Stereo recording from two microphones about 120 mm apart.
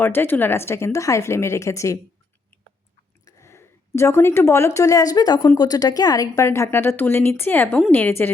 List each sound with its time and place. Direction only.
0.0 s a woman's voice: 15° left (ahead or behind)
3.2 s a woman's voice: 25° left (ahead or behind)